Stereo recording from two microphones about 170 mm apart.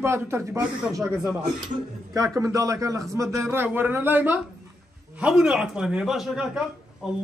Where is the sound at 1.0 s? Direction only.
Centre (ahead or behind).